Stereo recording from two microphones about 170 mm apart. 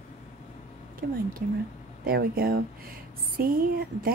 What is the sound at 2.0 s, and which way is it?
Speech, 60° right (ahead or behind).